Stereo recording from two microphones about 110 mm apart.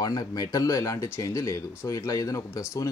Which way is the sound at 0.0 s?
35° left (ahead or behind).